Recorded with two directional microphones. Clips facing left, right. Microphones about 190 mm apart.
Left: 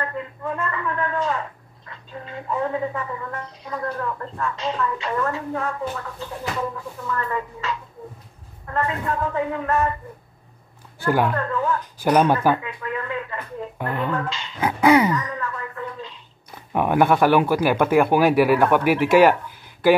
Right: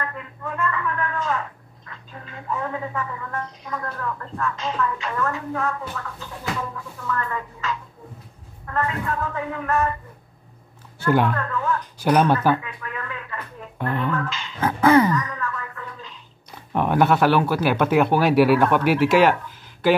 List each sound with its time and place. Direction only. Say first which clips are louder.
0.0 s speech: left 4 dB; 30° left (ahead or behind)
11.0 s speech: right 1 dB; 10° left (ahead or behind)
11.3 s speech: left 2 dB; 30° left (ahead or behind)
12.1 s speech: left 1 dB; 10° left (ahead or behind)
12.6 s a sound: left 5 dB; 30° left (ahead or behind)
13.7 s speech: right 2 dB; 15° left (ahead or behind)
14.0 s speech: even; 30° left (ahead or behind)
14.6 s speech: even; 10° left (ahead or behind)
15.1 s a sound: even; 30° left (ahead or behind)
16.7 s speech: left 1 dB; 10° left (ahead or behind)